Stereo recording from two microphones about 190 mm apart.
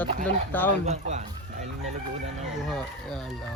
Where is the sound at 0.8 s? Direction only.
35° right (ahead or behind).